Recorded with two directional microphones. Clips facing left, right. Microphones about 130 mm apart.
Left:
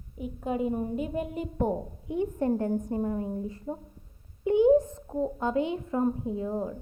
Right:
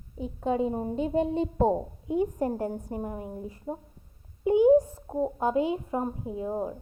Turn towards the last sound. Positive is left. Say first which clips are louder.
# even
turn(degrees=-20)  # may be behind; listen again after turning